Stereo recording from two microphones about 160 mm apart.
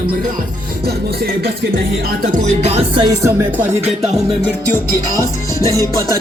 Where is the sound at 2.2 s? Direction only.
45° right (ahead or behind).